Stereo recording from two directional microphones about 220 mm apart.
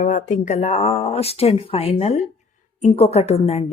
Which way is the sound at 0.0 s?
35° left (ahead or behind).